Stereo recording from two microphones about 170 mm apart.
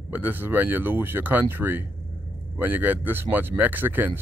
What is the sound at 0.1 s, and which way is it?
Speech, 10° right (ahead or behind).